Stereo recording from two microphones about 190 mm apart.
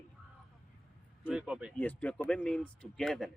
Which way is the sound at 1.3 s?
5° right (ahead or behind).